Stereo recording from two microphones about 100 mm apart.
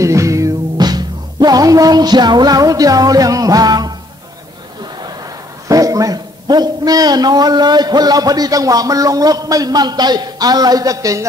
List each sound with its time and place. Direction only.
0.0 s music: 30° right (ahead or behind)
5.7 s a man's voice: 35° right (ahead or behind)